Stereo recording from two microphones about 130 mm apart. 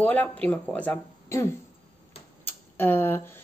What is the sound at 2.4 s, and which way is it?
Tick, 15° left (ahead or behind).